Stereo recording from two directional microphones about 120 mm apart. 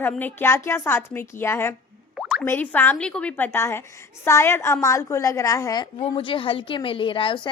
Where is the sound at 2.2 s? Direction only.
5° right (ahead or behind).